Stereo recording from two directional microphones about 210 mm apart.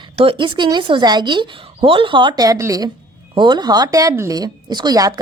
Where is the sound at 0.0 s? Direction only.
25° right (ahead or behind).